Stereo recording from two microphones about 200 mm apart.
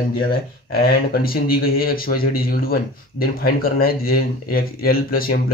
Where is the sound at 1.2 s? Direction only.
45° left (ahead or behind).